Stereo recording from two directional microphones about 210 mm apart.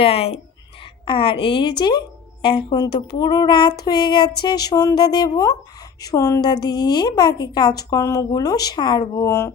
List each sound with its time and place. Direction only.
0.0 s a woman's voice: 30° left (ahead or behind)